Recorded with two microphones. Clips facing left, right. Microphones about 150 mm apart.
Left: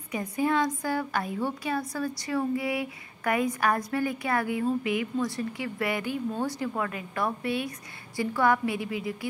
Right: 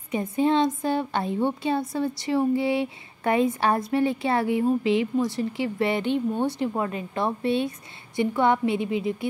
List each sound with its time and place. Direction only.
0.1 s a woman's voice: 25° right (ahead or behind)